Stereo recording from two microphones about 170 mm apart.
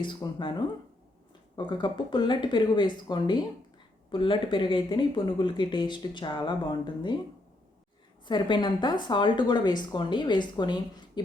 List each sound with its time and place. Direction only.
0.0 s speech: 25° left (ahead or behind)
1.5 s speech: 30° left (ahead or behind)
8.2 s a woman's voice: 25° left (ahead or behind)